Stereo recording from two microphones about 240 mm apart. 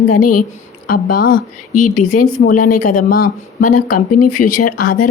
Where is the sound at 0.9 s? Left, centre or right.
Left.